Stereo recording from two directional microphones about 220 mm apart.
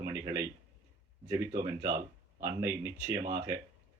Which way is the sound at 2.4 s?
15° right (ahead or behind).